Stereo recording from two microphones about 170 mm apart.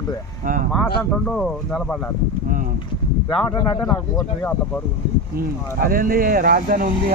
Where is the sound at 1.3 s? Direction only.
5° left (ahead or behind).